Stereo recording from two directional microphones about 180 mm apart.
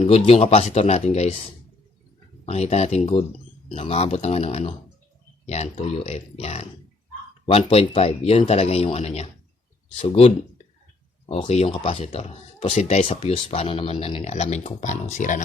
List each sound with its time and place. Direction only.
0.0 s speech: 35° left (ahead or behind)
2.5 s speech: 35° left (ahead or behind)